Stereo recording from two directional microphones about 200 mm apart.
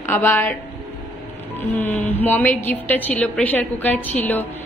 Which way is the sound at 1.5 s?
10° left (ahead or behind).